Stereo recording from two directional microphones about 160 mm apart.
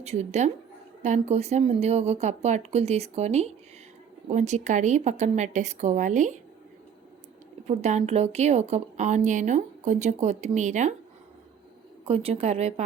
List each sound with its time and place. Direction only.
0.0 s a woman's voice: 45° right (ahead or behind)
7.7 s a woman's voice: 45° right (ahead or behind)
12.0 s a woman's voice: 40° right (ahead or behind)